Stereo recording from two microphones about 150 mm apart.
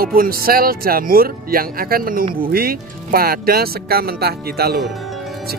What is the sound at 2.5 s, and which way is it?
Speech, 90° right.